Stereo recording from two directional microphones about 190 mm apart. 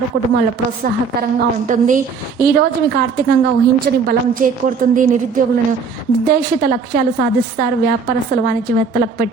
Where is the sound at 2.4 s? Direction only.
55° right (ahead or behind).